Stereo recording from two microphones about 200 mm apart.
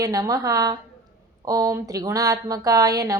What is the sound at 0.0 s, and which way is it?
Speech, 20° right (ahead or behind).